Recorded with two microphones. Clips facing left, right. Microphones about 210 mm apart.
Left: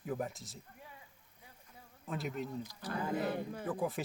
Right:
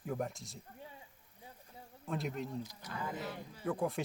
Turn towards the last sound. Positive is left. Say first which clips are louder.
# right 1 dB
turn(degrees=0)  # may be behind; listen again after turning